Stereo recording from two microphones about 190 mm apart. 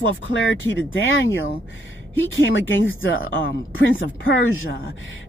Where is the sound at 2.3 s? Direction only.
90° left.